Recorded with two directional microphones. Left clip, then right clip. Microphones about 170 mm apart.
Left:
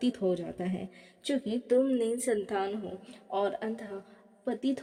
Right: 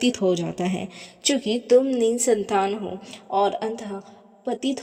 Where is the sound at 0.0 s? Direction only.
35° right (ahead or behind).